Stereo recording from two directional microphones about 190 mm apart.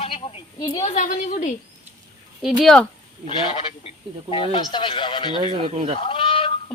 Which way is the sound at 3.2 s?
30° left (ahead or behind).